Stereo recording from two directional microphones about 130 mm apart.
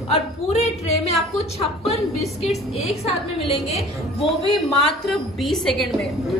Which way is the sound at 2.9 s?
50° left (ahead or behind).